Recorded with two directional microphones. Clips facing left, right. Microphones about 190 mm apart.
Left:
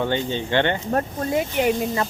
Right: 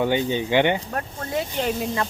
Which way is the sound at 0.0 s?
10° right (ahead or behind).